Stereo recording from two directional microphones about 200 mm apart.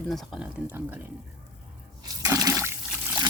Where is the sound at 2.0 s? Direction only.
15° right (ahead or behind).